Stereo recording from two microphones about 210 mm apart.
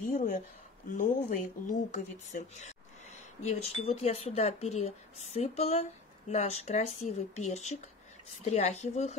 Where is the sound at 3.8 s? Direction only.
30° left (ahead or behind).